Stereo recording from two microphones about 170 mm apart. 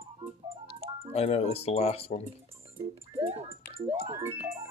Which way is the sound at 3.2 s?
35° right (ahead or behind).